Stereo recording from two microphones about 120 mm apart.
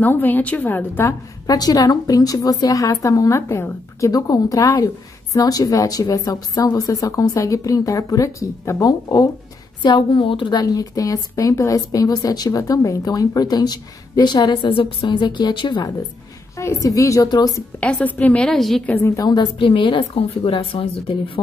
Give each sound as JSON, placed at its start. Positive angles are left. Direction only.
{"t": 0.0, "sound": "a woman's voice", "side_deg": 15}
{"t": 1.5, "sound": "a woman's voice", "side_deg": 35}
{"t": 9.8, "sound": "a woman's voice", "side_deg": 40}
{"t": 16.5, "sound": "a woman's voice", "side_deg": 25}
{"t": 17.7, "sound": "a woman's voice", "side_deg": 10}
{"t": 18.9, "sound": "a woman's voice", "side_deg": 20}
{"t": 19.2, "sound": "a woman's voice", "side_deg": 40}